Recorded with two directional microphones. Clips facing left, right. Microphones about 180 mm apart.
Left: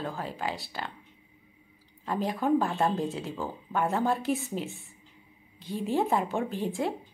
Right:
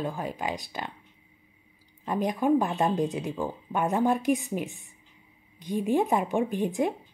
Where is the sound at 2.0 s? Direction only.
20° right (ahead or behind).